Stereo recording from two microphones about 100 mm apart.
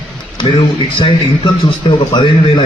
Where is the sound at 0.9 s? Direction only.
55° left (ahead or behind).